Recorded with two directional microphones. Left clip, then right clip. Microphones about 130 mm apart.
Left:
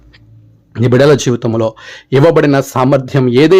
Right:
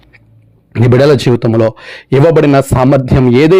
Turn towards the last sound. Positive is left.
turn(degrees=-40)  # may be behind; listen again after turning